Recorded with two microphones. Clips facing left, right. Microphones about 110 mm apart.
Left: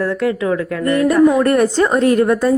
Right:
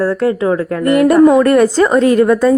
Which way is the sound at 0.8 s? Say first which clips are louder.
Right 5 dB; 75° right (ahead or behind).